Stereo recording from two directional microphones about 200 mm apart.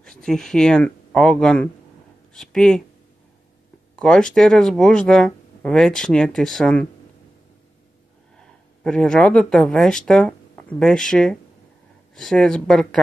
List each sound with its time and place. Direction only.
0.0 s speech: centre (ahead or behind)
3.9 s speech: centre (ahead or behind)
8.8 s speech: 5° left (ahead or behind)